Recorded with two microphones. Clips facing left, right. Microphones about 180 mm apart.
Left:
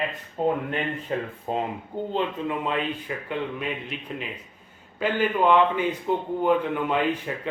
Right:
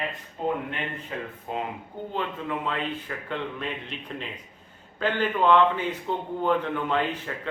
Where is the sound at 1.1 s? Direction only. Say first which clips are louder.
Left 6 dB; 40° left (ahead or behind).